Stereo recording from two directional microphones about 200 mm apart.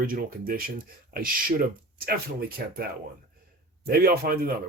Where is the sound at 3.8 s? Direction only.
50° right (ahead or behind).